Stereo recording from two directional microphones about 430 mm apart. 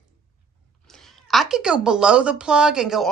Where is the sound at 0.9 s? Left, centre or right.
Centre.